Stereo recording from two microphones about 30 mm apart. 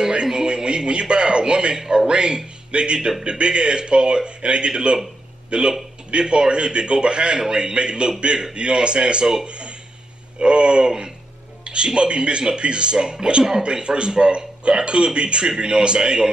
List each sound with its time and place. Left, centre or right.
0.1 s a sound: right
1.9 s speech: right
3.3 s a man's voice: right